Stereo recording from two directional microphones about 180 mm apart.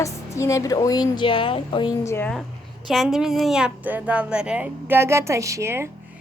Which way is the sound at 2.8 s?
Centre (ahead or behind).